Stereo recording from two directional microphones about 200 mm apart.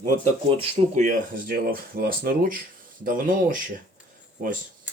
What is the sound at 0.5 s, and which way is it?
Speech, 30° right (ahead or behind).